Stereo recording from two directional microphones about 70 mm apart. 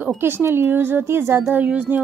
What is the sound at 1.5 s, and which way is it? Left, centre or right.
Speech, right.